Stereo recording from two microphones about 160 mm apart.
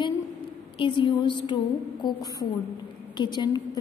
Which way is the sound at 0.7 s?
30° left (ahead or behind).